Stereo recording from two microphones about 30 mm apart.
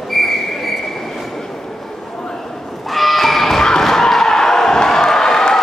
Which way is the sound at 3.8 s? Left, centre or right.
Centre.